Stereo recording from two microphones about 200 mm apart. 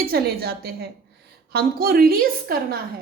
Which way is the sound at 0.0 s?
50° right (ahead or behind).